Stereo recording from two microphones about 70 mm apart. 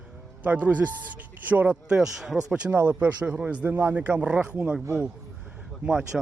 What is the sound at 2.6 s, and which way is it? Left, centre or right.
Speech, right.